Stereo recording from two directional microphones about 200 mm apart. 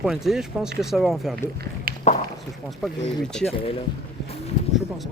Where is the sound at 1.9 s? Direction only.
50° right (ahead or behind).